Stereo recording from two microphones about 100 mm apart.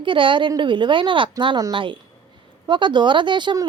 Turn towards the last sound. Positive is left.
turn(degrees=-50)  # may be behind; listen again after turning